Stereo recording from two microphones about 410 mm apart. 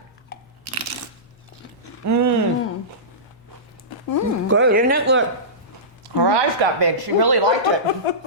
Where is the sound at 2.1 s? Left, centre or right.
Right.